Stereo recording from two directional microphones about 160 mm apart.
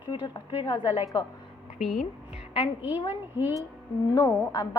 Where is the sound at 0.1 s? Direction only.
25° left (ahead or behind).